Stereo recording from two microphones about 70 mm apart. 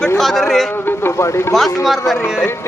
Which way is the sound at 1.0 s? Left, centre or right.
Left.